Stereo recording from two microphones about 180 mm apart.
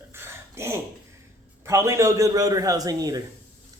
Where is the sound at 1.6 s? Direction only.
15° right (ahead or behind).